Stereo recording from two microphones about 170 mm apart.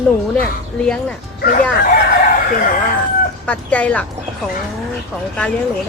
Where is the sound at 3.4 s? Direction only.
10° left (ahead or behind).